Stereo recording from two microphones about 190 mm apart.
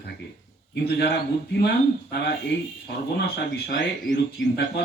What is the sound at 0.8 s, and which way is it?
Speech, 55° left (ahead or behind).